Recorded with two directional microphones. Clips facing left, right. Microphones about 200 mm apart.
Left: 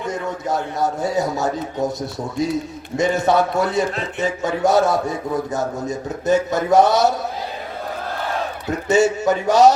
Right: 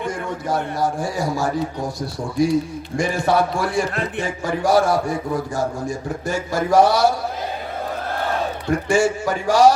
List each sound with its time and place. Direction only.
0.1 s a man's voice: 20° left (ahead or behind)
8.9 s a man's voice: 20° left (ahead or behind)